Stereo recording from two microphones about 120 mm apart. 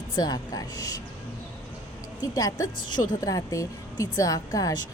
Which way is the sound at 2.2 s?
30° left (ahead or behind).